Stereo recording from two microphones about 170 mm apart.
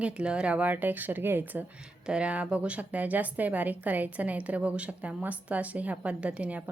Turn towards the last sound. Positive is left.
turn(degrees=-5)  # may be behind; listen again after turning